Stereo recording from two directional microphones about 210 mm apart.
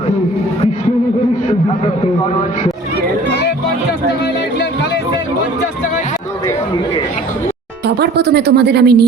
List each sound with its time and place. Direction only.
3.2 s music: 55° left (ahead or behind)
7.9 s speech: 50° right (ahead or behind)